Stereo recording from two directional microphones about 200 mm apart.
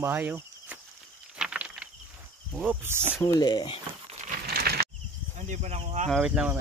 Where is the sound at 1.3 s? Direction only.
5° right (ahead or behind).